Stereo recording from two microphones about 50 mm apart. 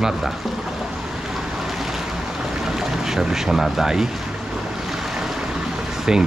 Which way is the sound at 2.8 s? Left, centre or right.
Centre.